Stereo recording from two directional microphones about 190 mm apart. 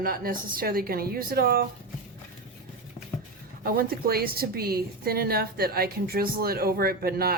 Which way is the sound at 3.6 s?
50° right (ahead or behind).